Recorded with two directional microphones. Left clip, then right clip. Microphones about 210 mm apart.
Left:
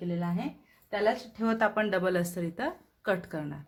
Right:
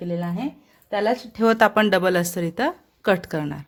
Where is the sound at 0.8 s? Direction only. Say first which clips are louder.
Right 6 dB; 50° right (ahead or behind).